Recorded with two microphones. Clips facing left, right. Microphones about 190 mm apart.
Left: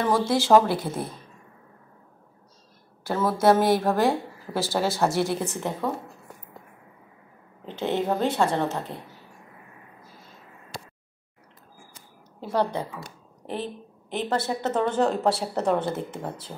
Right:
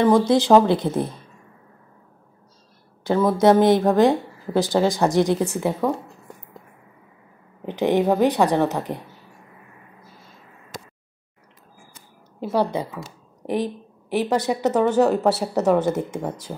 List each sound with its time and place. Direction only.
0.0 s speech: 15° right (ahead or behind)
3.0 s a woman's voice: 15° right (ahead or behind)
7.6 s speech: 15° right (ahead or behind)
12.4 s a woman's voice: 10° right (ahead or behind)